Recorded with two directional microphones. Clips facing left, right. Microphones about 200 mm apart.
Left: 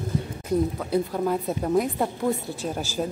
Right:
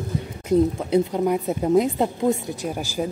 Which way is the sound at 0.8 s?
20° right (ahead or behind).